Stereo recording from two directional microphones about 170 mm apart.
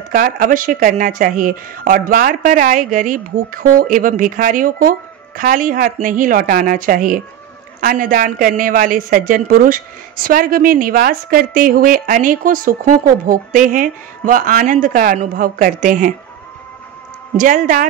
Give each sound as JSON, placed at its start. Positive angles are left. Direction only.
{"t": 0.1, "sound": "a woman's voice", "side_deg": -55}
{"t": 17.4, "sound": "a woman's voice", "side_deg": -50}